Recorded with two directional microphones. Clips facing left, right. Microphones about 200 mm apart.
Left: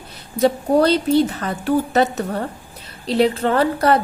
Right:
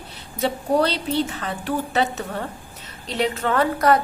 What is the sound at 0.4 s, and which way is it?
A woman's voice, 45° left (ahead or behind).